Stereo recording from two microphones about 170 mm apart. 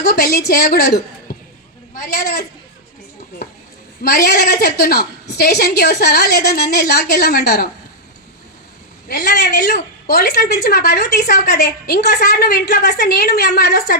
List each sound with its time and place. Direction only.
0.0 s a woman's voice: 70° left (ahead or behind)
1.3 s a sound: 65° left (ahead or behind)
2.0 s a woman's voice: 75° left (ahead or behind)
4.0 s a woman's voice: 70° left (ahead or behind)
9.0 s a woman's voice: 70° left (ahead or behind)